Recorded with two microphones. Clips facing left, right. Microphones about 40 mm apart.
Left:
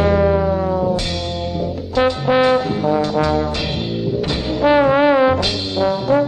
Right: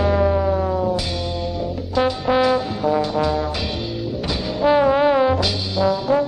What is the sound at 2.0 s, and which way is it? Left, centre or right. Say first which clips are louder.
Music: left 3 dB; left.